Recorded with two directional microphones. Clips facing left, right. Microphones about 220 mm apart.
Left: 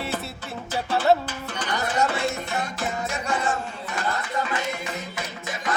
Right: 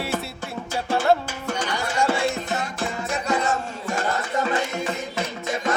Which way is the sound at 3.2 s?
35° right (ahead or behind).